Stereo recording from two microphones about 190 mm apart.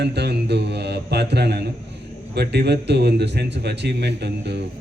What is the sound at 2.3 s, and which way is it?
A man's voice, 60° right (ahead or behind).